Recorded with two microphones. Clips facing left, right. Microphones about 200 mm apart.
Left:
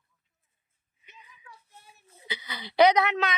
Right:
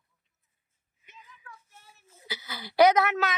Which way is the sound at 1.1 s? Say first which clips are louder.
Right 2 dB; 15° left (ahead or behind).